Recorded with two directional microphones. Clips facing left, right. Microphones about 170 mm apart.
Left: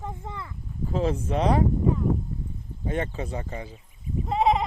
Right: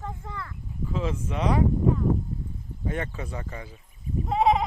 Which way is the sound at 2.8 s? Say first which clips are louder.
Left 3 dB; 25° left (ahead or behind).